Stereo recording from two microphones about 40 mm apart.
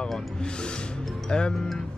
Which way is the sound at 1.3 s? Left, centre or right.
Left.